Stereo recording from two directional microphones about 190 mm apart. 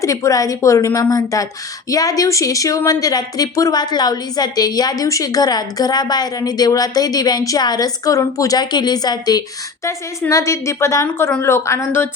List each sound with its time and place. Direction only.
0.0 s a woman's voice: 15° left (ahead or behind)